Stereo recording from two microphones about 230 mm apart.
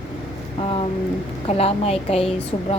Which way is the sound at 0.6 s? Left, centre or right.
Left.